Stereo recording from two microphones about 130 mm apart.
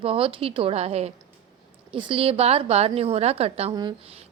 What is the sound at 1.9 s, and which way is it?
A woman's voice, 45° right (ahead or behind).